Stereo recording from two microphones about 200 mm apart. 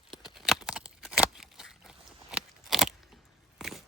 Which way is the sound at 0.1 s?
Centre (ahead or behind).